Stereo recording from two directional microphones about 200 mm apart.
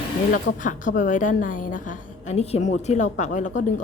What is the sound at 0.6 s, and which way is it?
A woman's voice, 40° left (ahead or behind).